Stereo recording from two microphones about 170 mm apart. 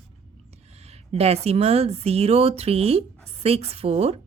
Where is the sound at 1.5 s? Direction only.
35° right (ahead or behind).